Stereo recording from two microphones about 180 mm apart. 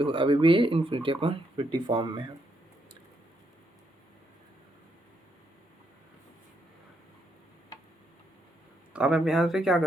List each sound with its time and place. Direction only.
0.0 s speech: 30° right (ahead or behind)
8.9 s speech: 5° right (ahead or behind)